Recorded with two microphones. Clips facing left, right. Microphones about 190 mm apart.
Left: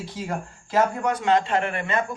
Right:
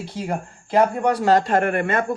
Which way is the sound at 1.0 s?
35° right (ahead or behind).